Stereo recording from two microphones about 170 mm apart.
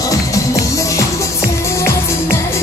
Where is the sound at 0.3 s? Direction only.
20° left (ahead or behind).